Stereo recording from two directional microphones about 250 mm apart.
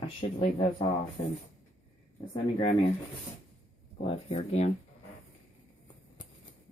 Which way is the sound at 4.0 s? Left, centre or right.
Left.